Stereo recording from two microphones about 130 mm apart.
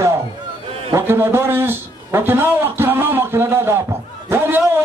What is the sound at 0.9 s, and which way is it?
A man's voice, 20° right (ahead or behind).